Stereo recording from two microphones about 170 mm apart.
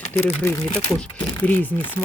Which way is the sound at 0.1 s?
10° left (ahead or behind).